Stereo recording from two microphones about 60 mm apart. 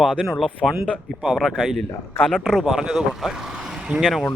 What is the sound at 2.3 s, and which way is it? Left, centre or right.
Speech, centre.